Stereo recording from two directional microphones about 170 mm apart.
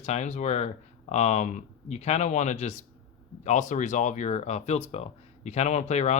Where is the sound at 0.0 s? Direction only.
40° left (ahead or behind).